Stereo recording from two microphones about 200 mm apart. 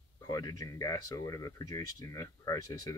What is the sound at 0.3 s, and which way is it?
Speech, 15° left (ahead or behind).